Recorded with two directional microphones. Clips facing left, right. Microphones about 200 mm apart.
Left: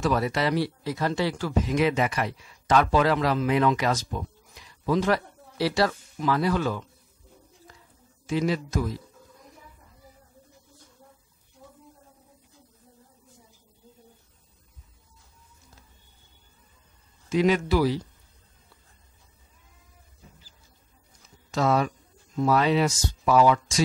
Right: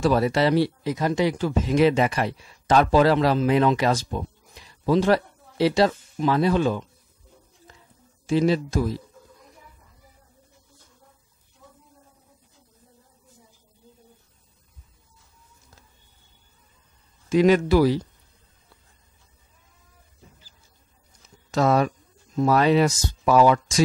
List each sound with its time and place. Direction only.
0.0 s speech: 30° right (ahead or behind)
7.7 s a sound: 25° right (ahead or behind)
8.3 s a man's voice: 30° right (ahead or behind)
17.3 s speech: 45° right (ahead or behind)
21.5 s speech: 45° right (ahead or behind)